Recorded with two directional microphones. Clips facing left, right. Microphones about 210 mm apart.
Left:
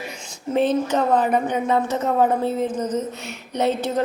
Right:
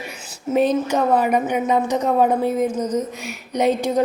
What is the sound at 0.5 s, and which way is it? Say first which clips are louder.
A woman's voice: right 1 dB; 10° right (ahead or behind).